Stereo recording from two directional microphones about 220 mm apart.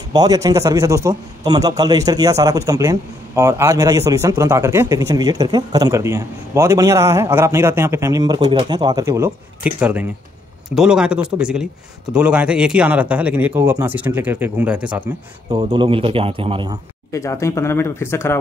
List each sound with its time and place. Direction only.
0.1 s a man's voice: 15° right (ahead or behind)
15.5 s a man's voice: 20° right (ahead or behind)
17.1 s speech: 15° left (ahead or behind)